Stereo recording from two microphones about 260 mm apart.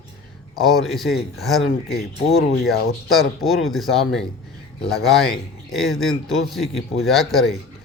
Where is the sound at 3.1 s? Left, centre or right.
Centre.